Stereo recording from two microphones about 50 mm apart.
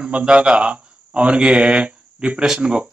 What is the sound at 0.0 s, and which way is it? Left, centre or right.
Speech, right.